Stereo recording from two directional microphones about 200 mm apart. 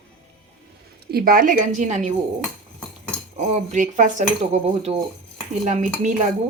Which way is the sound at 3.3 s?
35° right (ahead or behind).